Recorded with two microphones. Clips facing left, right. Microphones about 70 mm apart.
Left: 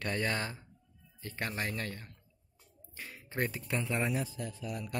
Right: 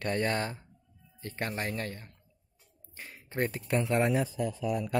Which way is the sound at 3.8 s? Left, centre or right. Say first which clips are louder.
Right 7 dB; right.